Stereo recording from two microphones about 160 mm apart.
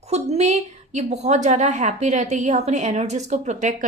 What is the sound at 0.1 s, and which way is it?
A woman's voice, 40° right (ahead or behind).